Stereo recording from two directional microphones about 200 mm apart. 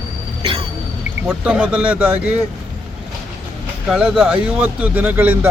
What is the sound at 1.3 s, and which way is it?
A man's voice, 5° right (ahead or behind).